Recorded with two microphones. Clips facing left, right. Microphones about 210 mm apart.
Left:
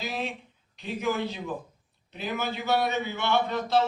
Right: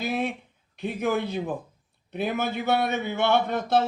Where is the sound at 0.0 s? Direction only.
55° right (ahead or behind).